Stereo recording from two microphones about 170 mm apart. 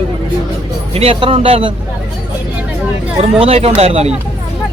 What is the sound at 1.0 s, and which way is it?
Speech, 35° right (ahead or behind).